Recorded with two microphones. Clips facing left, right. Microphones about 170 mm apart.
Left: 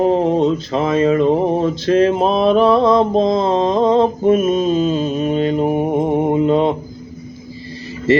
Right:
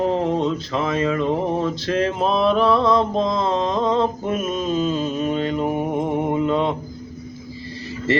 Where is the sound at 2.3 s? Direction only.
50° left (ahead or behind).